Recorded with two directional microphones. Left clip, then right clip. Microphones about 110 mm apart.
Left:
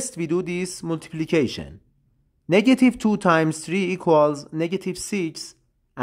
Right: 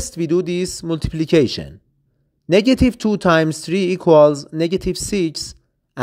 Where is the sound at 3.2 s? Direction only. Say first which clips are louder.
Right 4 dB; 35° right (ahead or behind).